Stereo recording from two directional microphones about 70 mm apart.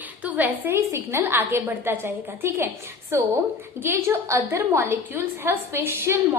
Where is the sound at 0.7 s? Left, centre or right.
Right.